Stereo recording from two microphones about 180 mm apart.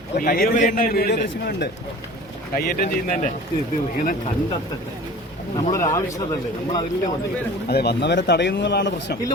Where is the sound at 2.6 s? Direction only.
50° left (ahead or behind).